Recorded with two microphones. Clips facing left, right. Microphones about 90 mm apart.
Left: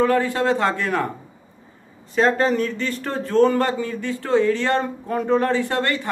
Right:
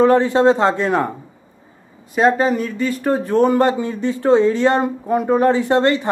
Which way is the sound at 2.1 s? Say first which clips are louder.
Right 3 dB; 15° right (ahead or behind).